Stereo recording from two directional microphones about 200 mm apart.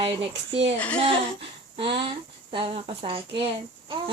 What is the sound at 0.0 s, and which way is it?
Speech, 30° right (ahead or behind).